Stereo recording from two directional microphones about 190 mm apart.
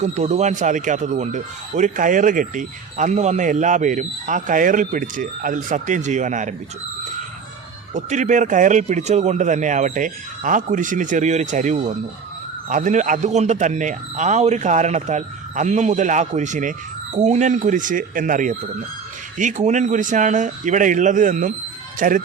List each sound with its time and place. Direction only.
0.0 s speech: 35° right (ahead or behind)
7.9 s speech: 40° right (ahead or behind)